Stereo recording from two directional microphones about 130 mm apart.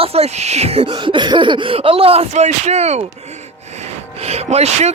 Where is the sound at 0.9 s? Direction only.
35° right (ahead or behind); by 3.1 s 55° right (ahead or behind).